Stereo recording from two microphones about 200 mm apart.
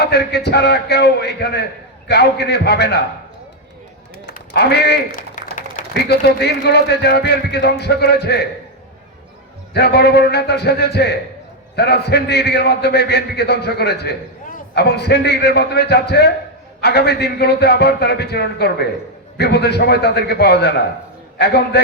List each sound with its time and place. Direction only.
0.0 s a man's voice: 55° left (ahead or behind)
4.3 s speech: 55° left (ahead or behind)
9.7 s a man's voice: 55° left (ahead or behind)